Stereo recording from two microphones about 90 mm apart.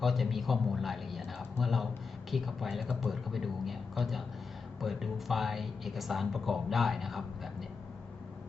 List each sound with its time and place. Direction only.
0.0 s speech: centre (ahead or behind)